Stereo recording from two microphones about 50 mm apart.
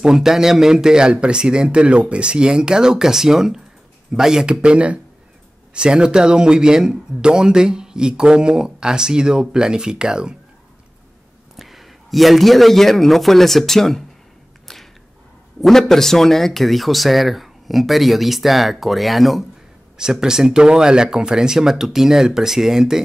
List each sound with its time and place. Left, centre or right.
0.0 s speech: centre
4.5 s speech: right
11.5 s a man's voice: centre
15.9 s speech: centre
20.0 s speech: centre